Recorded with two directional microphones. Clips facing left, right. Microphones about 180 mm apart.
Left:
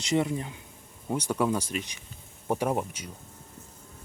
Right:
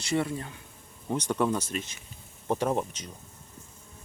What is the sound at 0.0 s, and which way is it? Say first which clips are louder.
Speech: left 2 dB; 20° left (ahead or behind).